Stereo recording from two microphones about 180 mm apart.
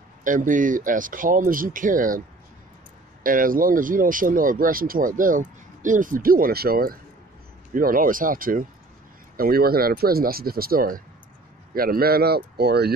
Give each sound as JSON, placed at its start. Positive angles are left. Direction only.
{"t": 0.2, "sound": "speech", "side_deg": -45}
{"t": 3.3, "sound": "speech", "side_deg": -50}